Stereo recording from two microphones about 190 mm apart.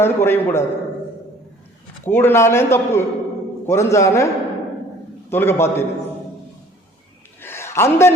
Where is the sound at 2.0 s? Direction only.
10° left (ahead or behind).